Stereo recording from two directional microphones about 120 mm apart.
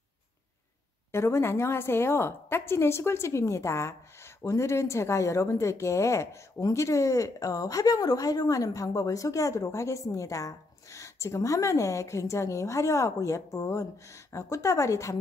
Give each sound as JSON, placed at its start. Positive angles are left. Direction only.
{"t": 1.1, "sound": "a woman's voice", "side_deg": 25}